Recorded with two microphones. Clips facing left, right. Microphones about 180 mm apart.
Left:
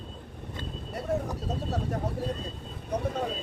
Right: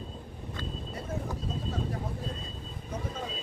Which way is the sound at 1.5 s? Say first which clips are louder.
Left 4 dB; 70° left (ahead or behind).